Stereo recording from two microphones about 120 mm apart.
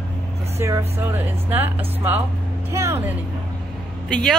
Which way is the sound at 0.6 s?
25° right (ahead or behind).